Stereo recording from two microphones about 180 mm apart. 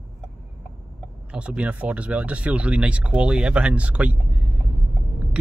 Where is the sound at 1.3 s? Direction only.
5° right (ahead or behind).